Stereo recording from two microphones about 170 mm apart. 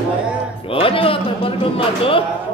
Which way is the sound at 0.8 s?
30° left (ahead or behind).